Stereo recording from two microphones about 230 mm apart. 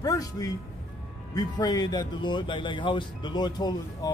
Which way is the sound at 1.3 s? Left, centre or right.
Centre.